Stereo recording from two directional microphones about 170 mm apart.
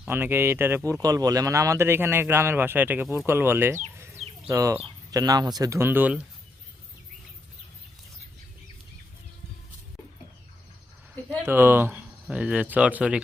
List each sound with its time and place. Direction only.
0.0 s speech: 10° right (ahead or behind)
3.9 s chicken: 15° right (ahead or behind)
4.4 s speech: 20° right (ahead or behind)
11.4 s speech: 10° right (ahead or behind)